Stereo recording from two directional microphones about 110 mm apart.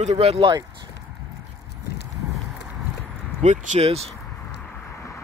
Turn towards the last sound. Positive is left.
turn(degrees=-75)  # may be behind; listen again after turning